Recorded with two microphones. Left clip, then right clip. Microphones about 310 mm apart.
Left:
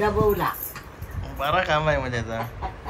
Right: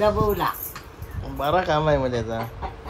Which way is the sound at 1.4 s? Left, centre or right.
Centre.